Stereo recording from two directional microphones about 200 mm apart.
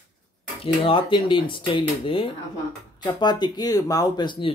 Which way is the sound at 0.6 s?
25° left (ahead or behind).